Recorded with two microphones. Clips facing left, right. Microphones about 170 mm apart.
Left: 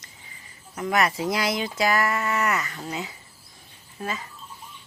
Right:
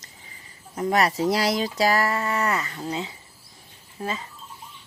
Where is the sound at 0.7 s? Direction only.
35° right (ahead or behind).